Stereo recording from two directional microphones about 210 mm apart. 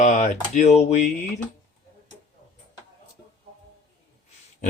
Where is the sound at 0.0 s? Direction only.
35° left (ahead or behind).